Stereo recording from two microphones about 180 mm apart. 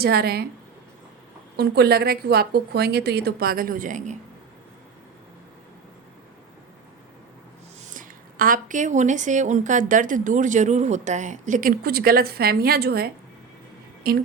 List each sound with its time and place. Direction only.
0.0 s a woman's voice: 60° right (ahead or behind)
1.5 s a woman's voice: 60° right (ahead or behind); by 4.2 s 45° right (ahead or behind)
7.9 s a woman's voice: 50° right (ahead or behind)